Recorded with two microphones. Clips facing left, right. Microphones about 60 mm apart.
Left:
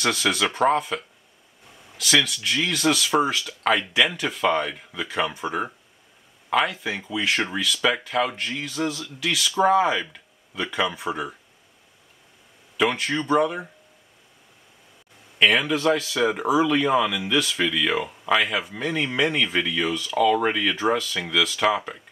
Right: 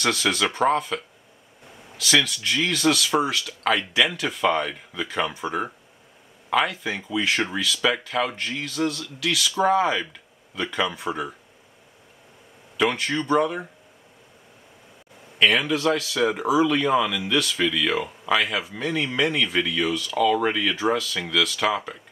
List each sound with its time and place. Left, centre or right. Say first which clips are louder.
0.0 s speech: even; centre
9.6 s speech: left 2 dB; centre
12.7 s speech: even; centre
15.3 s speech: even; centre